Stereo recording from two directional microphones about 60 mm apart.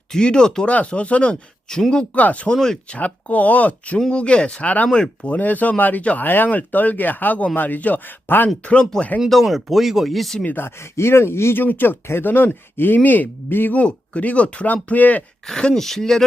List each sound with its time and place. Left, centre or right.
0.1 s speech: centre
2.1 s speech: left
2.5 s speech: centre
2.9 s speech: left
5.3 s speech: left
8.6 s speech: centre
9.3 s speech: centre
10.4 s speech: left
10.9 s speech: left
11.6 s speech: left
13.7 s speech: left
15.4 s speech: centre